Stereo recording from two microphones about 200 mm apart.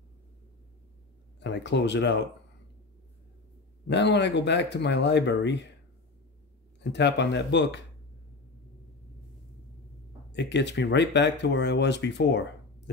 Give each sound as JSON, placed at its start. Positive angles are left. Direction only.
{"t": 1.4, "sound": "speech", "side_deg": 60}
{"t": 3.8, "sound": "speech", "side_deg": 60}
{"t": 6.8, "sound": "speech", "side_deg": 60}
{"t": 10.3, "sound": "speech", "side_deg": 60}